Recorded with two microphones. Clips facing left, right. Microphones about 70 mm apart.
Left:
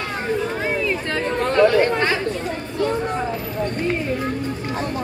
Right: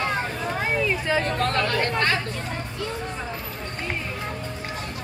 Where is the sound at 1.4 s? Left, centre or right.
Centre.